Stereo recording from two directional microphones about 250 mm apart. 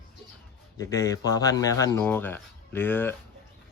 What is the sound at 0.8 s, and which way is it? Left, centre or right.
A man's voice, centre.